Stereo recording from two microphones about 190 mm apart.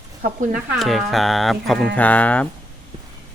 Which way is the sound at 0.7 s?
Centre (ahead or behind).